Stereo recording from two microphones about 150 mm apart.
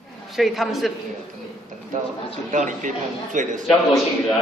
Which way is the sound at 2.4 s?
60° right (ahead or behind).